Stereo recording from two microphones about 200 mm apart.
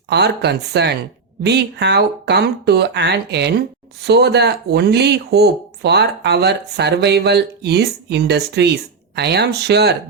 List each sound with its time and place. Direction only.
0.1 s speech: 55° right (ahead or behind)